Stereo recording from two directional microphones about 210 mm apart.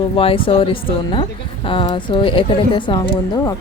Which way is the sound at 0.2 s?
25° left (ahead or behind).